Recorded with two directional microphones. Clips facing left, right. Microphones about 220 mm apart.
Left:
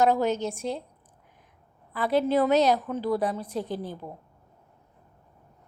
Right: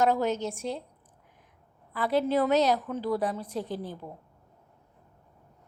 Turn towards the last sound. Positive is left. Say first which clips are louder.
# left 2 dB
turn(degrees=20)  # may be behind; listen again after turning